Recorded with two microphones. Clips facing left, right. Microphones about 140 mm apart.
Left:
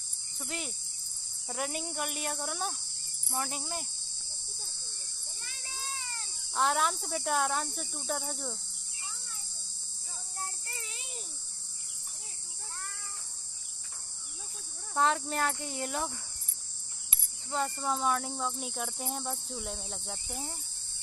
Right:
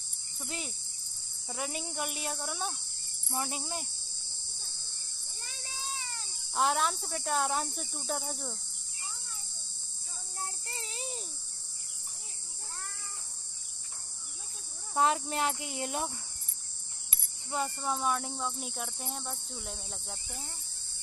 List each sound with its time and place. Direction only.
0.4 s speech: centre (ahead or behind)
3.3 s speech: 10° right (ahead or behind)
5.9 s speech: 5° right (ahead or behind)
10.7 s a sound: 30° right (ahead or behind)
15.0 s speech: 10° right (ahead or behind)
17.7 s speech: centre (ahead or behind)